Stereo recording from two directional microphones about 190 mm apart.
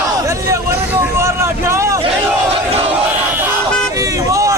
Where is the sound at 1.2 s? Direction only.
15° right (ahead or behind).